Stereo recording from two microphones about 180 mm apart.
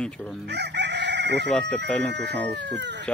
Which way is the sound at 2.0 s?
70° right (ahead or behind).